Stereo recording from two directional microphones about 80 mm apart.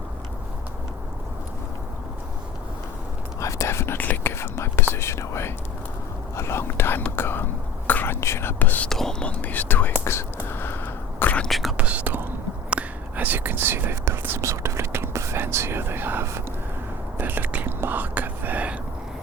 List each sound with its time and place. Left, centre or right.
3.4 s whispering: left
4.9 s speech: left
6.3 s whispering: left
7.2 s a sound: left
7.9 s whispering: left
8.9 s whispering: centre
9.4 s whispering: left
10.0 s whispering: left
10.5 s a sound: left
11.2 s whispering: centre
11.4 s whispering: centre
11.8 s whispering: centre
14.4 s speech: right
17.2 s whispering: right